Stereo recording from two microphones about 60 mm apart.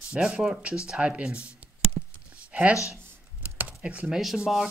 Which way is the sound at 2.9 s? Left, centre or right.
Right.